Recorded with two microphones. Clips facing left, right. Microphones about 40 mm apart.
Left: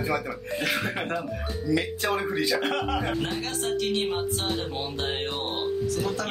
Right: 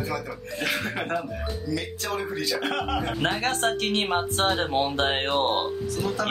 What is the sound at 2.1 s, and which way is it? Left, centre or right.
Speech, centre.